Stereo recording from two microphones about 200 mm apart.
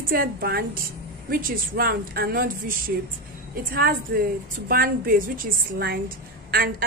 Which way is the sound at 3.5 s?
45° right (ahead or behind).